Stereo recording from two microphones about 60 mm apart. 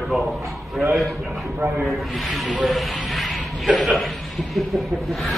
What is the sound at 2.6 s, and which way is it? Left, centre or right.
Snake, centre.